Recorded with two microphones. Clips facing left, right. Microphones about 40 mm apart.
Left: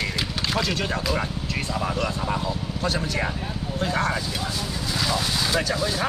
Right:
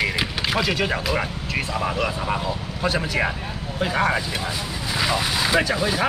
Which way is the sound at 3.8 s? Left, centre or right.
Centre.